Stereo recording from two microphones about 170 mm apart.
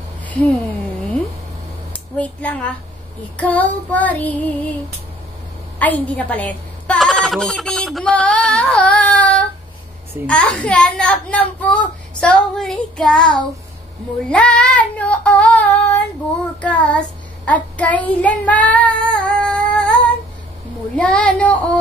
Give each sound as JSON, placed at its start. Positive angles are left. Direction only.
{"t": 0.3, "sound": "speech", "side_deg": 10}
{"t": 2.1, "sound": "a child's voice", "side_deg": 10}
{"t": 5.8, "sound": "a woman's voice", "side_deg": 10}
{"t": 17.5, "sound": "child singing", "side_deg": 10}
{"t": 20.9, "sound": "a child's voice", "side_deg": 5}